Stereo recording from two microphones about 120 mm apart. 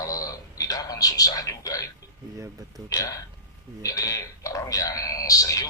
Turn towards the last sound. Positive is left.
turn(degrees=30)  # may be behind; listen again after turning